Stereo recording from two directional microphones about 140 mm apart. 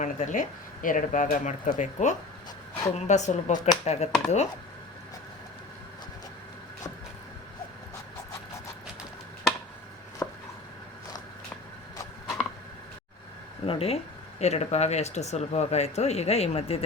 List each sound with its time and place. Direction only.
0.0 s speech: 60° left (ahead or behind)
10.2 s chopping: 20° left (ahead or behind)
13.7 s speech: 45° left (ahead or behind)